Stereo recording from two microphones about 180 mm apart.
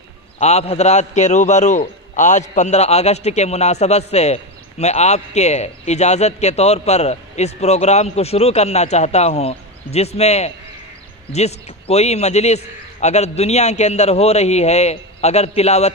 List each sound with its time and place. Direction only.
0.4 s a man's voice: 35° left (ahead or behind)